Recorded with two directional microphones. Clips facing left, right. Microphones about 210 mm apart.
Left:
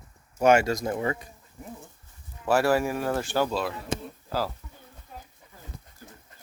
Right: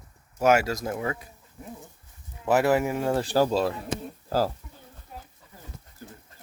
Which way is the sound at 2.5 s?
20° right (ahead or behind).